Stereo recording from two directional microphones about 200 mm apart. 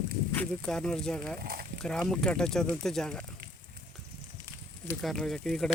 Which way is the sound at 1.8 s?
Centre (ahead or behind).